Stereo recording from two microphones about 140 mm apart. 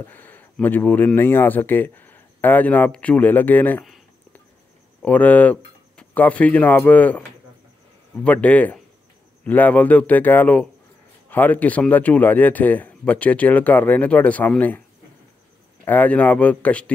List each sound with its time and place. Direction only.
0.0 s speech: 15° left (ahead or behind)
5.0 s speech: 10° left (ahead or behind)
15.8 s speech: 10° left (ahead or behind)